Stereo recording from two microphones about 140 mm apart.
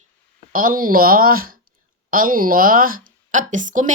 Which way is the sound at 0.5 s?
85° right.